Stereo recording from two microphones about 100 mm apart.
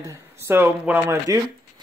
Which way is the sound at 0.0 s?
30° right (ahead or behind).